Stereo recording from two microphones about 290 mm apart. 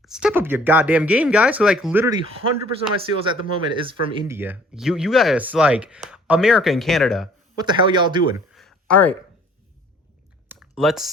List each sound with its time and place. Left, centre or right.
0.0 s speech: centre
3.0 s speech: centre
7.5 s speech: centre
8.5 s a sound: centre
10.5 s typing: centre